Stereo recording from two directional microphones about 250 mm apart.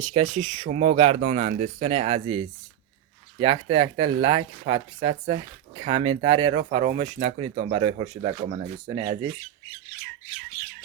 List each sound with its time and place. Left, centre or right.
0.0 s speech: right